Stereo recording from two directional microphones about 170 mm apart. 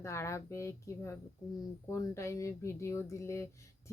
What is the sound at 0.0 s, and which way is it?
Speech, 15° left (ahead or behind).